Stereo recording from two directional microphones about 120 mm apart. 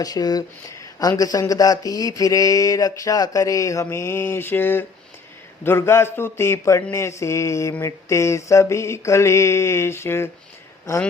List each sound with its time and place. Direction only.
0.0 s speech: 35° left (ahead or behind)
0.9 s mantra: 30° left (ahead or behind)